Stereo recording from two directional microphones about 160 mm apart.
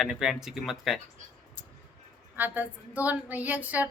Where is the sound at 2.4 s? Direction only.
10° right (ahead or behind).